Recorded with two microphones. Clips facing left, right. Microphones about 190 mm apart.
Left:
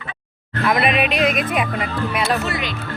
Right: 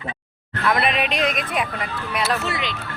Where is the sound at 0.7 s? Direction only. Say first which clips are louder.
Left 3 dB; 5° left (ahead or behind).